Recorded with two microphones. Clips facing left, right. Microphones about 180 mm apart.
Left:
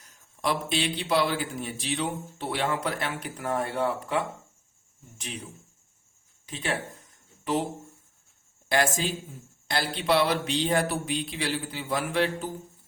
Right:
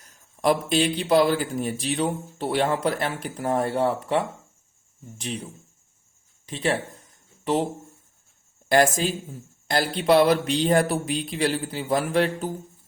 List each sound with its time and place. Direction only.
0.4 s a man's voice: 40° right (ahead or behind)
8.7 s speech: 45° right (ahead or behind)